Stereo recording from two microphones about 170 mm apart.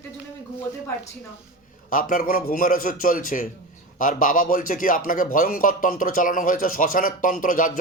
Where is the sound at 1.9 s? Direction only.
55° left (ahead or behind).